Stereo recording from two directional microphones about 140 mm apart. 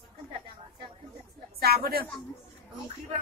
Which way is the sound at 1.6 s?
90° right.